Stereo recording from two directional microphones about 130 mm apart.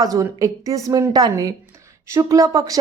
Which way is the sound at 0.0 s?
25° right (ahead or behind).